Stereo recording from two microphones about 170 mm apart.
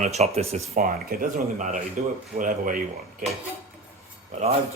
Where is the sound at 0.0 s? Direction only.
40° right (ahead or behind).